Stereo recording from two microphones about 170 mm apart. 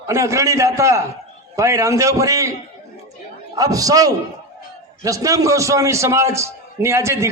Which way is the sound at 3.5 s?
20° right (ahead or behind).